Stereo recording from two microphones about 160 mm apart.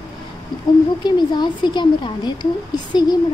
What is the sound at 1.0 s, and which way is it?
A woman's voice, 25° left (ahead or behind).